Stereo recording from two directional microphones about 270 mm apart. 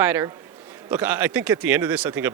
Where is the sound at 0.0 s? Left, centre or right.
Centre.